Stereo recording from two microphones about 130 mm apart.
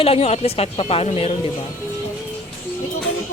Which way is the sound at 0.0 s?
50° left (ahead or behind).